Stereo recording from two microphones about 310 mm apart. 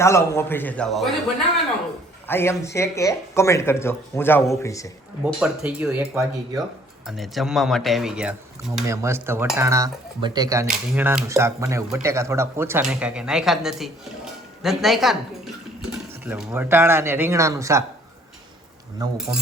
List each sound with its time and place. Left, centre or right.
0.0 s speech: centre
2.2 s speech: centre
5.2 s speech: centre
19.0 s speech: centre